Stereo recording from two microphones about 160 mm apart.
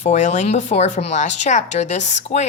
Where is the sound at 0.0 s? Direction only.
50° left (ahead or behind).